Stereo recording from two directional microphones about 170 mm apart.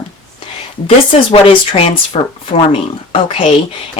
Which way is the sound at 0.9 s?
35° left (ahead or behind).